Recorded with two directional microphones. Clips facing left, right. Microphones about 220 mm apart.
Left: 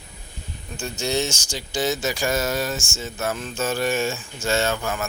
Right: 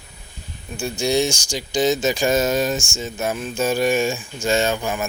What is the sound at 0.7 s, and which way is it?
Speech, 10° right (ahead or behind).